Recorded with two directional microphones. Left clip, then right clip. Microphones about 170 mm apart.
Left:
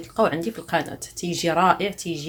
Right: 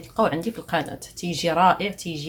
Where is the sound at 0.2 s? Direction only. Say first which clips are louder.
Left 1 dB; centre (ahead or behind).